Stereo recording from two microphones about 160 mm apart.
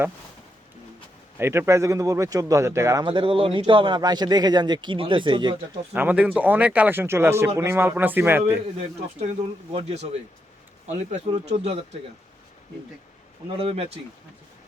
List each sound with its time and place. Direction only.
1.4 s speech: 15° right (ahead or behind)
3.0 s speech: 30° right (ahead or behind)
5.9 s speech: 10° right (ahead or behind)
9.7 s speech: 45° right (ahead or behind)
13.6 s speech: 35° right (ahead or behind)